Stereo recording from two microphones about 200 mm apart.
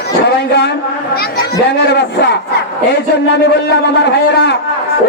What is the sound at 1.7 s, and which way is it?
Speech, 55° left (ahead or behind).